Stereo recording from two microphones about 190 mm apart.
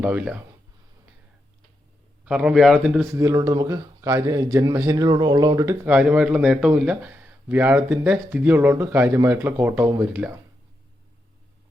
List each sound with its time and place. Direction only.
0.0 s speech: 5° right (ahead or behind)
2.2 s speech: 5° right (ahead or behind)
3.2 s speech: 15° right (ahead or behind)